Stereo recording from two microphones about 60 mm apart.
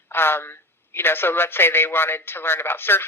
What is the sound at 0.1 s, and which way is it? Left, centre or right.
Speech, left.